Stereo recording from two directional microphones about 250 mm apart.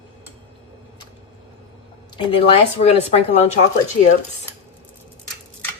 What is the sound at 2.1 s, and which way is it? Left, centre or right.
Speech, left.